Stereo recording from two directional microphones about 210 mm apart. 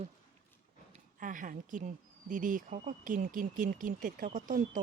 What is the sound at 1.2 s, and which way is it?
Speech, 40° right (ahead or behind).